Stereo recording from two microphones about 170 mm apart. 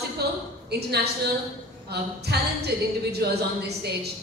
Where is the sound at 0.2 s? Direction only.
70° right (ahead or behind).